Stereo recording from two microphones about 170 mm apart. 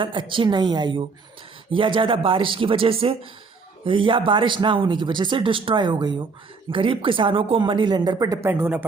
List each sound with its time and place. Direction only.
0.0 s speech: 30° right (ahead or behind); by 8.9 s 10° right (ahead or behind)